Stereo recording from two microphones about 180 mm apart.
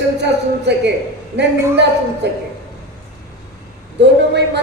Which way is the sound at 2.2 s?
70° right (ahead or behind).